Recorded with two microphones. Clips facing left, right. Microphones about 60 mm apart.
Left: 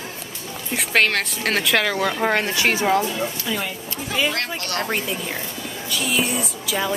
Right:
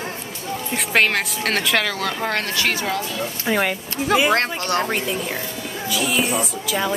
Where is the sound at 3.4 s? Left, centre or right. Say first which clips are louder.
Right 6 dB; right.